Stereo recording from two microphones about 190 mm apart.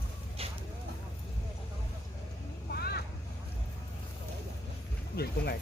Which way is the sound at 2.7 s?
55° left (ahead or behind).